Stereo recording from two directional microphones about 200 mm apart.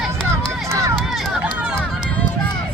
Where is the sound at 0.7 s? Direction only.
15° right (ahead or behind).